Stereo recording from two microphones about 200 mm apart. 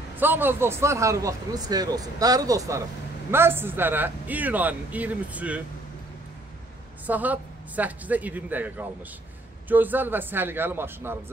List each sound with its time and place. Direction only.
0.2 s speech: 10° right (ahead or behind)
7.1 s speech: 10° right (ahead or behind)